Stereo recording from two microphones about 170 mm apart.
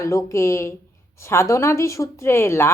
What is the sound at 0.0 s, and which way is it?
A woman's voice, 20° left (ahead or behind).